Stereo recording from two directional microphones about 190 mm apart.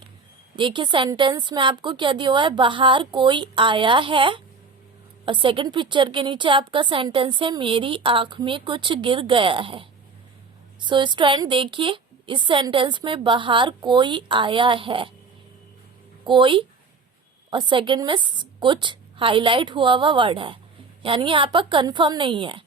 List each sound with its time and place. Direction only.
0.5 s a woman's voice: 25° right (ahead or behind)
16.2 s a woman's voice: 25° right (ahead or behind)